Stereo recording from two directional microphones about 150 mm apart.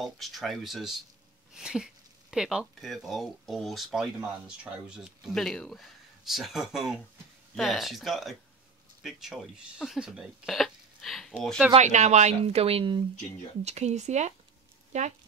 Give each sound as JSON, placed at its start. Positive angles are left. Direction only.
{"t": 0.0, "sound": "speech", "side_deg": 0}
{"t": 11.7, "sound": "speech", "side_deg": -50}
{"t": 13.7, "sound": "speech", "side_deg": -50}